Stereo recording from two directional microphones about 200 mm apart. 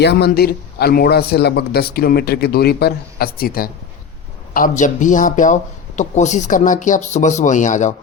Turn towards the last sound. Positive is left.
turn(degrees=40)  # may be behind; listen again after turning